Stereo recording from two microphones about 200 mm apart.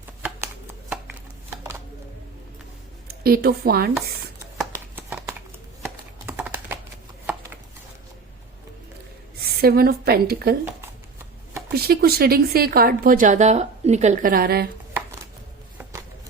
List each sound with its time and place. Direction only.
0.2 s shuffling cards: 10° right (ahead or behind)
3.1 s a woman's voice: 50° right (ahead or behind)
4.5 s a sound: 5° right (ahead or behind)
5.8 s computer keyboard: 10° right (ahead or behind)
9.6 s a woman's voice: 50° right (ahead or behind)
11.7 s a woman's voice: 50° right (ahead or behind)
15.8 s a sound: 15° right (ahead or behind)